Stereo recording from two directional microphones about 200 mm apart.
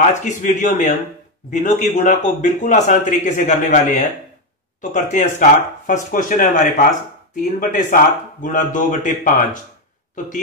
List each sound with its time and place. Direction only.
0.0 s a man's voice: 35° left (ahead or behind)